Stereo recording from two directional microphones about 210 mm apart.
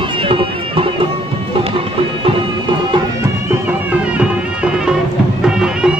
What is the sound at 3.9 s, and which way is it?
Music, 5° right (ahead or behind).